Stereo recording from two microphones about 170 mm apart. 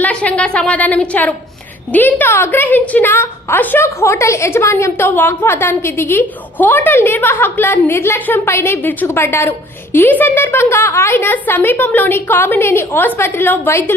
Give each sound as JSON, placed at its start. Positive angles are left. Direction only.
{"t": 0.0, "sound": "a woman's voice", "side_deg": 10}